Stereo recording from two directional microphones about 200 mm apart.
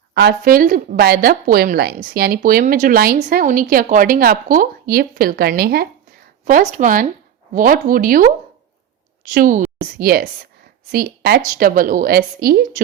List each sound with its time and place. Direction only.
0.1 s speech: 55° right (ahead or behind)
6.4 s a woman's voice: 40° right (ahead or behind)
9.3 s a woman's voice: 40° right (ahead or behind)